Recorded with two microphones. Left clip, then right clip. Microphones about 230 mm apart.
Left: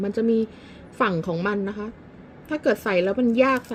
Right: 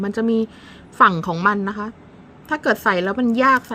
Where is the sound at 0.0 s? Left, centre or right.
Right.